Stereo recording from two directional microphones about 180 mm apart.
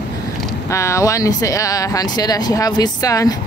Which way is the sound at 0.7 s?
15° left (ahead or behind).